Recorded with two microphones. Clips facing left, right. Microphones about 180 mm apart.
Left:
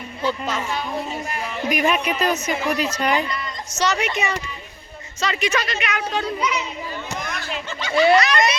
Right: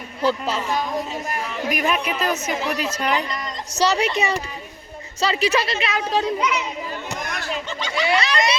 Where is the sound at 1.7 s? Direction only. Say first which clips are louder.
Left 3 dB; centre (ahead or behind).